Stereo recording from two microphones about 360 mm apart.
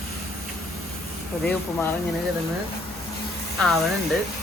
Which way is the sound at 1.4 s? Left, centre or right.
Centre.